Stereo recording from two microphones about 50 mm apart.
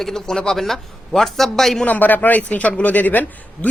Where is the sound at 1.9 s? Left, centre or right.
Left.